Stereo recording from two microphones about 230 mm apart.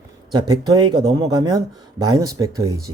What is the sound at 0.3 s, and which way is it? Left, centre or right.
Speech, centre.